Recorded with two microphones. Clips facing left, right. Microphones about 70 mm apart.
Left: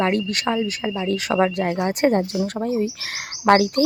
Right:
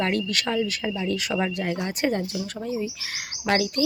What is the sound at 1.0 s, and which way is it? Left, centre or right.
Speech, left.